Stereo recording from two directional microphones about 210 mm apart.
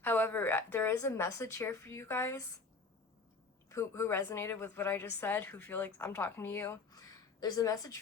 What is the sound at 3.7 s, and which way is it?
A woman's voice, 10° left (ahead or behind).